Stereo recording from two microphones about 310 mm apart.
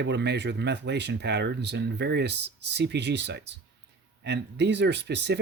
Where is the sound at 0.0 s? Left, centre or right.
Right.